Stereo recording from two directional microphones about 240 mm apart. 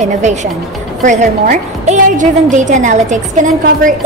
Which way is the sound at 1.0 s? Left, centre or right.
Right.